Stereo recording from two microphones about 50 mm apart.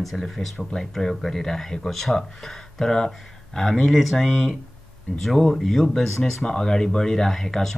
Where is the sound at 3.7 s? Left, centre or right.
Centre.